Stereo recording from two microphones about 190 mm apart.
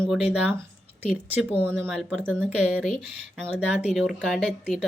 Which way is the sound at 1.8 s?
Centre (ahead or behind).